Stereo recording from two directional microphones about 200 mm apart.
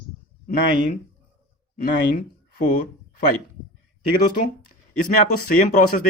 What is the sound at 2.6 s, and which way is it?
Speech, 45° left (ahead or behind).